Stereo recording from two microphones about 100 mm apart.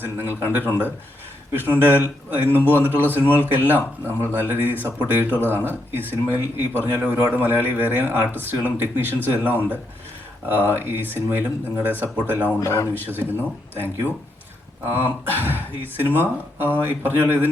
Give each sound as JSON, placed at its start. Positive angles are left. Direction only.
{"t": 0.0, "sound": "a man's voice", "side_deg": -20}
{"t": 1.5, "sound": "a man's voice", "side_deg": -20}
{"t": 12.5, "sound": "speech", "side_deg": 35}
{"t": 12.9, "sound": "a man's voice", "side_deg": -20}